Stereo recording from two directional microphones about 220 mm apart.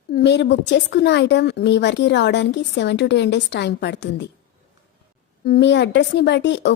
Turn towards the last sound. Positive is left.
turn(degrees=50)  # may be behind; listen again after turning